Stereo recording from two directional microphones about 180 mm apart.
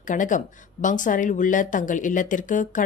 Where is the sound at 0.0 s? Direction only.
45° left (ahead or behind).